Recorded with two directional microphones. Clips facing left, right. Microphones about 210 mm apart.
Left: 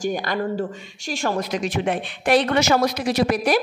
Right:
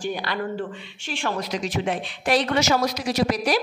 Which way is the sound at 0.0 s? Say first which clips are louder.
Left 4 dB; 45° left (ahead or behind).